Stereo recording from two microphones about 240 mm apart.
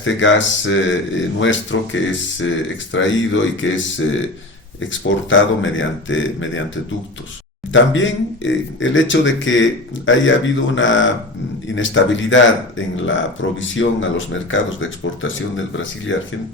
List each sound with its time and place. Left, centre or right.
0.0 s speech: left
7.7 s speech: left